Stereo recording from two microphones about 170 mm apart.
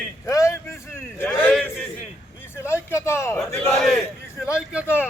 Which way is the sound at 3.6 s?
5° left (ahead or behind).